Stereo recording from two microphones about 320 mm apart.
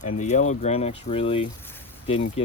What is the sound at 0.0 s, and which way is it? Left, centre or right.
Speech, left.